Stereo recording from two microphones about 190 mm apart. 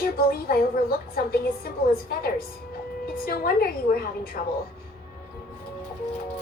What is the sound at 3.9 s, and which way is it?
Speech, 55° left (ahead or behind).